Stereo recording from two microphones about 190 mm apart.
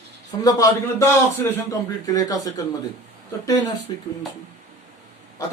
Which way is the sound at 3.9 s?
25° left (ahead or behind).